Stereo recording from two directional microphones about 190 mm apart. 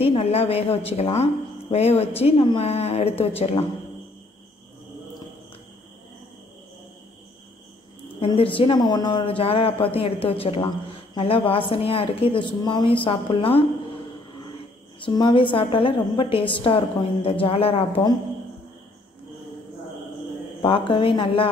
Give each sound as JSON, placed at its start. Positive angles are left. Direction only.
{"t": 0.0, "sound": "a woman's voice", "side_deg": 30}
{"t": 8.2, "sound": "a woman's voice", "side_deg": 30}
{"t": 15.0, "sound": "speech", "side_deg": 25}
{"t": 20.6, "sound": "speech", "side_deg": 25}